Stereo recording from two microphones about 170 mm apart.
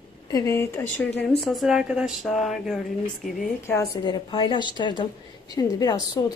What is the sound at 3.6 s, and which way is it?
A woman's voice, 20° left (ahead or behind).